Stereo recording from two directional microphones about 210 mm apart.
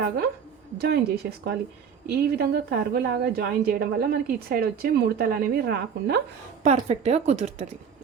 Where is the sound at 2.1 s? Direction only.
50° right (ahead or behind).